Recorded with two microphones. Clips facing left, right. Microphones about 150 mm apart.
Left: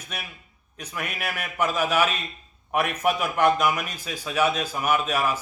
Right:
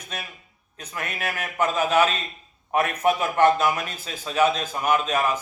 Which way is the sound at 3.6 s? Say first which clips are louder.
Right 1 dB; 30° right (ahead or behind).